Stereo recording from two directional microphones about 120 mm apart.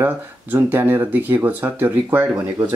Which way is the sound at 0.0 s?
15° right (ahead or behind).